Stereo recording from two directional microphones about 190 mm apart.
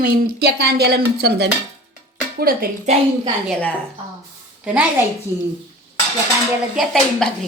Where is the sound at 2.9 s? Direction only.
35° right (ahead or behind).